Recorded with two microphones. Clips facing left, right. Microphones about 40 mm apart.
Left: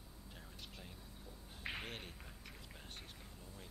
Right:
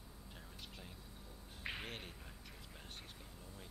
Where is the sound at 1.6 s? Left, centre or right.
Centre.